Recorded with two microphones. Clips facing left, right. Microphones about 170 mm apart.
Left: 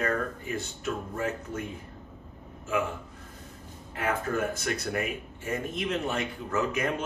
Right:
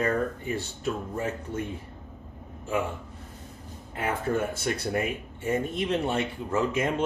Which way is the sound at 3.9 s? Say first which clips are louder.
Right 2 dB; 25° right (ahead or behind).